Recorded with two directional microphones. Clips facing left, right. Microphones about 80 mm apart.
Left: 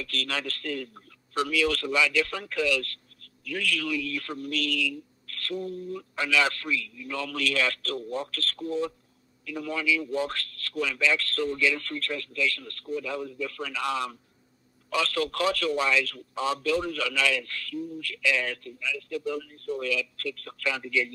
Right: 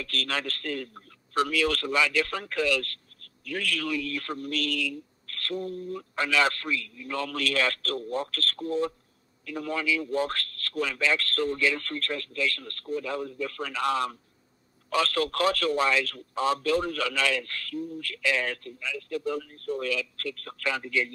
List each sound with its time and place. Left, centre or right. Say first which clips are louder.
0.0 s a man's voice: right 1 dB; right